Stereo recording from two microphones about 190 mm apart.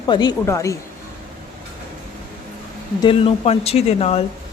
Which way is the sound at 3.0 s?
30° left (ahead or behind).